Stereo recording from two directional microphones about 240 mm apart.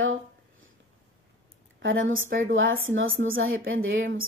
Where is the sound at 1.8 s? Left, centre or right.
Right.